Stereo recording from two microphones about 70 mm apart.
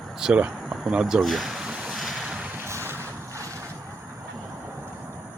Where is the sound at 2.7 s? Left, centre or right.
Right.